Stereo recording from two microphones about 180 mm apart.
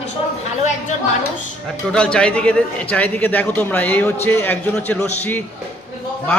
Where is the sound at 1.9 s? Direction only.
5° left (ahead or behind).